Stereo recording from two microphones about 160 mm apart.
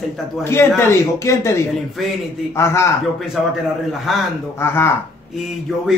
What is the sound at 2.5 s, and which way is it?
Speech, 15° left (ahead or behind).